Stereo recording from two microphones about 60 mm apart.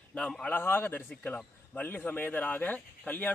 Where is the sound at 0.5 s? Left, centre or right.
Left.